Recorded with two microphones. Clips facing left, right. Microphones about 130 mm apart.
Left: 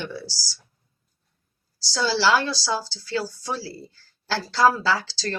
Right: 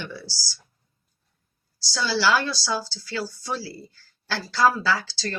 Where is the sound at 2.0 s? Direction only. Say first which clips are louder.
Left 2 dB; 35° left (ahead or behind).